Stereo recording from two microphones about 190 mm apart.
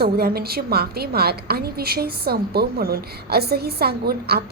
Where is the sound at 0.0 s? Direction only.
55° right (ahead or behind).